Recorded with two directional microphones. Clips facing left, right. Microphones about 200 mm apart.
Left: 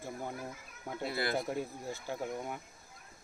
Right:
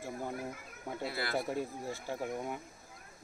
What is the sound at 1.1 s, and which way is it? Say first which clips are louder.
Speech: left 4 dB; 20° left (ahead or behind).